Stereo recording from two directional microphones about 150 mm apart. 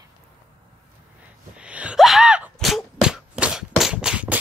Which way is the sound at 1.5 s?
10° right (ahead or behind).